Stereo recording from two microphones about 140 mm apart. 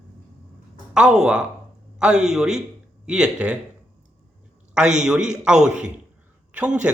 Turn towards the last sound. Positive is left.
turn(degrees=-10)  # may be behind; listen again after turning